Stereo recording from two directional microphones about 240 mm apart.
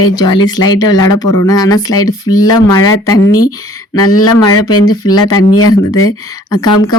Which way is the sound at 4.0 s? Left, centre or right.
Left.